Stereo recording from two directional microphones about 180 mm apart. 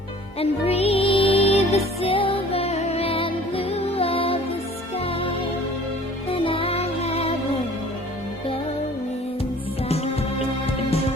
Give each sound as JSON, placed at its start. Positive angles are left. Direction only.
{"t": 0.3, "sound": "music", "side_deg": 35}